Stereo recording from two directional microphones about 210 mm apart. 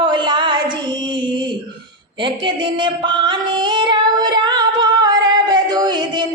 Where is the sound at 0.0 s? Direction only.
20° right (ahead or behind).